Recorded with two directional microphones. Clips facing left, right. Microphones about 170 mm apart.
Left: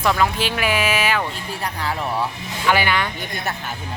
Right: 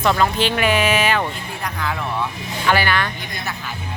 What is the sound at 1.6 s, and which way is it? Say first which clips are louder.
Speech: even; 35° left (ahead or behind).